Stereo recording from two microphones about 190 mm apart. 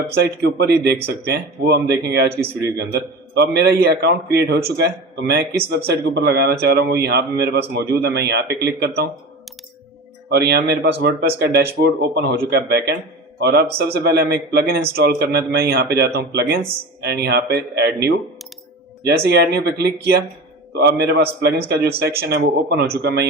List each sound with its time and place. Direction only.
0.1 s a man's voice: 55° right (ahead or behind)
2.4 s speech: 15° right (ahead or behind)
2.7 s a man's voice: 60° right (ahead or behind)
10.2 s a man's voice: 60° right (ahead or behind)